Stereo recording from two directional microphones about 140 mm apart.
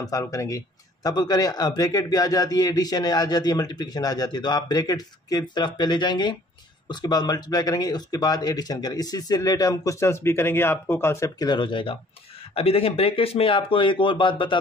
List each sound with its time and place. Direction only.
0.0 s speech: 25° left (ahead or behind)